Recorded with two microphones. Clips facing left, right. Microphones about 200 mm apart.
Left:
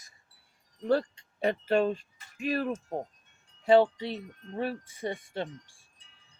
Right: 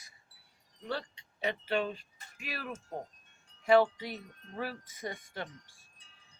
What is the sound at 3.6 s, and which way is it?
Wind chime, 30° left (ahead or behind).